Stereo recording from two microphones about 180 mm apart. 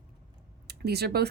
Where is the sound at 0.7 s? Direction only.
65° right (ahead or behind).